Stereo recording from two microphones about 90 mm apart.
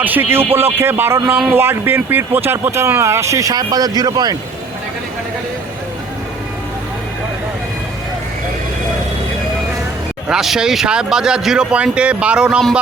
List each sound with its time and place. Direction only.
0.0 s speech: 20° right (ahead or behind); by 4.4 s 45° right (ahead or behind)
10.2 s speech: 5° right (ahead or behind)